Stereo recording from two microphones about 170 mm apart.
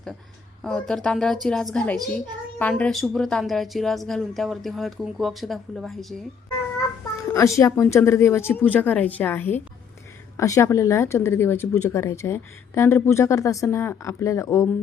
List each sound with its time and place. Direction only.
0.6 s speech: 5° left (ahead or behind)
7.3 s speech: 20° left (ahead or behind)